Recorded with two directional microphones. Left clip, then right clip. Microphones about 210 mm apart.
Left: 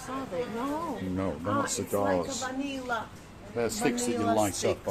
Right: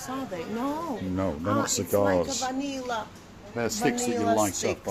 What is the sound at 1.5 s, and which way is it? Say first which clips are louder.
Speech: right 3 dB; 45° right (ahead or behind).